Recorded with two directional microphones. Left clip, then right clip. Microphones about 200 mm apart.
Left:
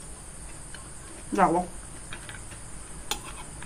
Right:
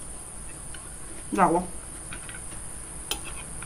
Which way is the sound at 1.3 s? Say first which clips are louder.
Right 1 dB; 10° right (ahead or behind).